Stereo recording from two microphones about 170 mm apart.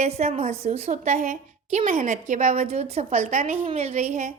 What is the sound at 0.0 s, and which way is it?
A woman's voice, 40° right (ahead or behind).